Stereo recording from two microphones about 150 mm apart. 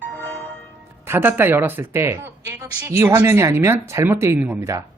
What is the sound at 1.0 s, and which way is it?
A man's voice, 15° right (ahead or behind).